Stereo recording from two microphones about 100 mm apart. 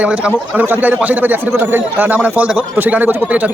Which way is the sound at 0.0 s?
10° right (ahead or behind).